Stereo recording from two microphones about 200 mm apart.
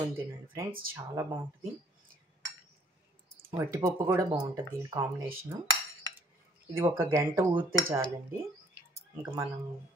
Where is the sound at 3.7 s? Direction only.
15° right (ahead or behind).